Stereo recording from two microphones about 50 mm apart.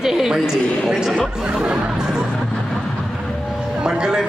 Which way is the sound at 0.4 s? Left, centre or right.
Centre.